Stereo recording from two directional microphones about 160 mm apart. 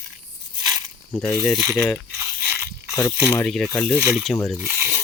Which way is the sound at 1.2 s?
15° left (ahead or behind).